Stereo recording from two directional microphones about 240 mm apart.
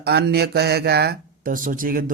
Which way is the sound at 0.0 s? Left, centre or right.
Right.